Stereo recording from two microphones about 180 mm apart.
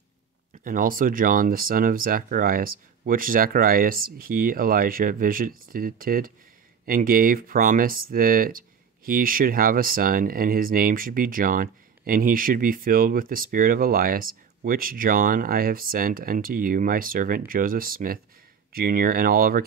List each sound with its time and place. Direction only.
0.7 s speech: 50° right (ahead or behind)